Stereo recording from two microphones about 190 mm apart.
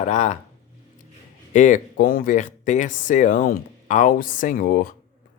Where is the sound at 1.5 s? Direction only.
40° left (ahead or behind).